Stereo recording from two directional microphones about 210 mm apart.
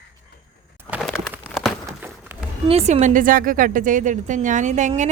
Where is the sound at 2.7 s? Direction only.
35° right (ahead or behind).